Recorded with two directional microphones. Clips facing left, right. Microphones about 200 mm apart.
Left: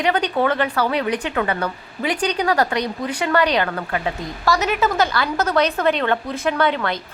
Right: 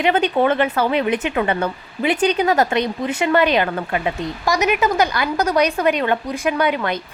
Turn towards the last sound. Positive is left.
turn(degrees=-15)  # may be behind; listen again after turning